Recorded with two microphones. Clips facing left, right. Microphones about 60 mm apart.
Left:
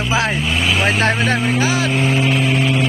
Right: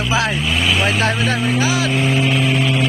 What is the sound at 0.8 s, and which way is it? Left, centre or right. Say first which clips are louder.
Speech: left 1 dB; left.